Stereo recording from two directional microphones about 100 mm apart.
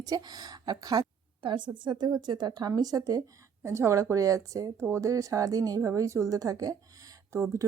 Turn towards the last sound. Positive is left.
turn(degrees=-30)  # may be behind; listen again after turning